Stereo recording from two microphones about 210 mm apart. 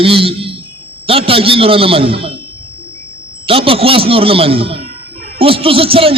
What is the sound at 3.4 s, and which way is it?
A man's voice, 25° right (ahead or behind).